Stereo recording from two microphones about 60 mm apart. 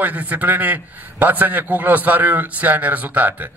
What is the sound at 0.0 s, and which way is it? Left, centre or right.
A man's voice, right.